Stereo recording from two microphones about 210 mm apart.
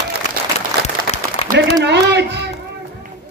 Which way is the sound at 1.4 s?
30° left (ahead or behind).